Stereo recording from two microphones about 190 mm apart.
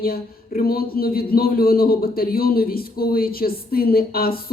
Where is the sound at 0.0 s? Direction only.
50° left (ahead or behind).